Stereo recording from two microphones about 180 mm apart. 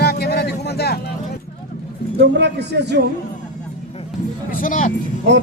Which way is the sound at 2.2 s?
70° right (ahead or behind).